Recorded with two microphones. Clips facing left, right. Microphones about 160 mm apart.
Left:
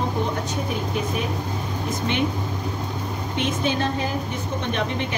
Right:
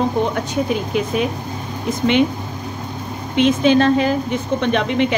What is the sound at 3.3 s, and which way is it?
A woman's voice, 90° right.